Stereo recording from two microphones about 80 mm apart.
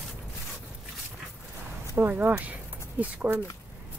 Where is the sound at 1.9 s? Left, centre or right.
Right.